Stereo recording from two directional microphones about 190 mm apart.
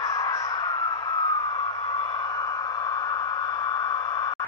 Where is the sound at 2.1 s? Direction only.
20° left (ahead or behind).